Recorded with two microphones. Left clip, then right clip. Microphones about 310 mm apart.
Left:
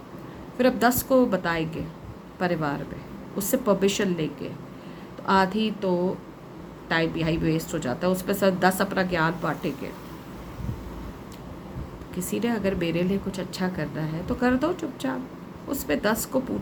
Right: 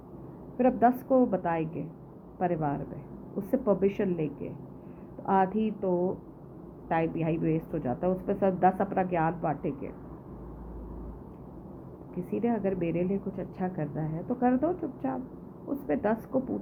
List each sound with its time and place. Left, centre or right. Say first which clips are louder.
0.5 s a woman's voice: left 3 dB; left
12.3 s a woman's voice: left 3 dB; left